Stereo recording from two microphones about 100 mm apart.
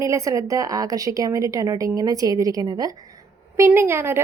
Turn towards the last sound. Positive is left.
turn(degrees=-25)  # may be behind; listen again after turning